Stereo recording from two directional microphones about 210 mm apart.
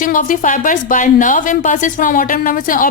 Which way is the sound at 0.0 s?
40° left (ahead or behind).